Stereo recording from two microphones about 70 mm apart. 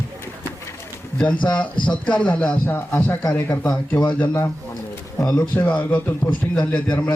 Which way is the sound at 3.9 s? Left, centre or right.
Centre.